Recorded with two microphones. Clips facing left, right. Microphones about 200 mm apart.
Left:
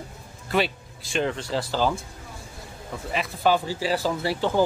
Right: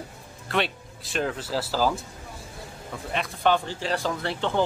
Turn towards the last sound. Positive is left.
turn(degrees=5)  # may be behind; listen again after turning